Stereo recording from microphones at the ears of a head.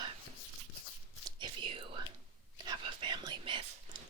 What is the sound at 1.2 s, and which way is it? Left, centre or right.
Whispering, right.